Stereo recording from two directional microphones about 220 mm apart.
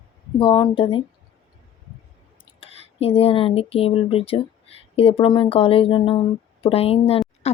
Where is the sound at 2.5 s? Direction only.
25° left (ahead or behind).